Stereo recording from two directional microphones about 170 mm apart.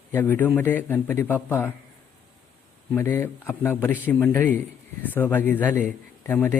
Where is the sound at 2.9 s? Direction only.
15° left (ahead or behind).